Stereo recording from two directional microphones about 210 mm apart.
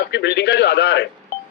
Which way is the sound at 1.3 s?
50° left (ahead or behind).